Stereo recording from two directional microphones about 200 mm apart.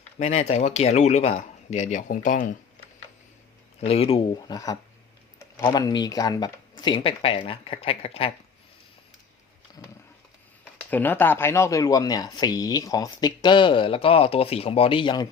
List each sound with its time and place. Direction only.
0.2 s speech: 30° left (ahead or behind)
3.8 s speech: 30° left (ahead or behind)
10.8 s speech: 10° left (ahead or behind)